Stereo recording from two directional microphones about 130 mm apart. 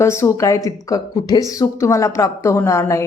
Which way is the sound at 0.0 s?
20° left (ahead or behind).